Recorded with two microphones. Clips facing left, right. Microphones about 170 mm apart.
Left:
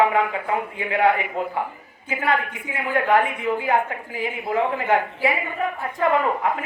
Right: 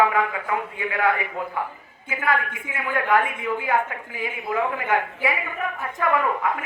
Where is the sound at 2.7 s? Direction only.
25° left (ahead or behind).